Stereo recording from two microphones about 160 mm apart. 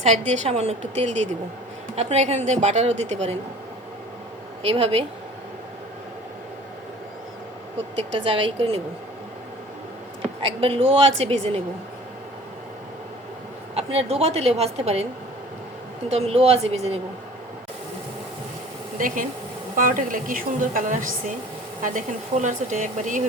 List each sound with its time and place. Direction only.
0.0 s a woman's voice: 45° right (ahead or behind)
4.6 s a woman's voice: 35° right (ahead or behind)
8.2 s a woman's voice: 35° right (ahead or behind)
10.4 s a woman's voice: 35° right (ahead or behind)
13.7 s a woman's voice: 40° right (ahead or behind)
16.0 s a woman's voice: 40° right (ahead or behind)
18.9 s a woman's voice: 55° right (ahead or behind)